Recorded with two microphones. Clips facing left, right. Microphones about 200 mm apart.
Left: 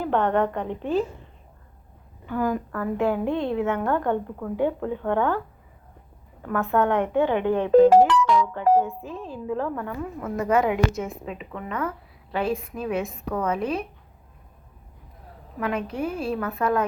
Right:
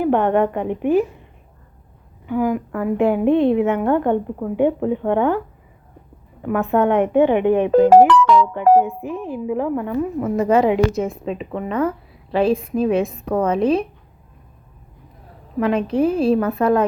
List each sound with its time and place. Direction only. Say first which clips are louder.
0.0 s a woman's voice: right 6 dB; 15° right (ahead or behind)
2.2 s a woman's voice: right 5 dB; 15° right (ahead or behind)
6.4 s a woman's voice: right 5 dB; 15° right (ahead or behind)
7.9 s music: right 5 dB; 65° right (ahead or behind)
9.0 s a woman's voice: right 8 dB; 15° right (ahead or behind)
15.6 s a woman's voice: right 9 dB; 25° right (ahead or behind)